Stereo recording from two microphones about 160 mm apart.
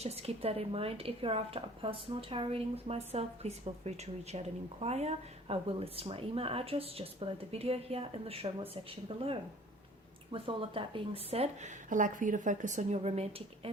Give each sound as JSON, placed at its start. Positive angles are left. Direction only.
{"t": 0.0, "sound": "a woman's voice", "side_deg": -40}
{"t": 10.3, "sound": "speech", "side_deg": -35}